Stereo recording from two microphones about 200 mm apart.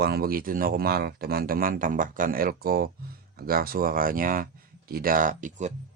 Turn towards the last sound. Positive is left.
turn(degrees=-40)  # may be behind; listen again after turning